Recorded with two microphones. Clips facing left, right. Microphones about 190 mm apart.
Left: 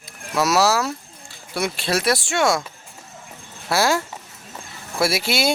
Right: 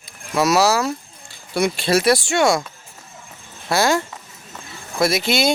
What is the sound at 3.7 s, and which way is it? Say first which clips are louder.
Speech: right 2 dB; 5° left (ahead or behind).